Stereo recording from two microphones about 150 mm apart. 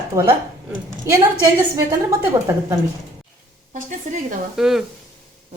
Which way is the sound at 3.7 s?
55° right (ahead or behind).